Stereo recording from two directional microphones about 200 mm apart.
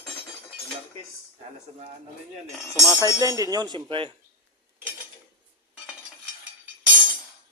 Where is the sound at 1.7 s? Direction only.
30° right (ahead or behind).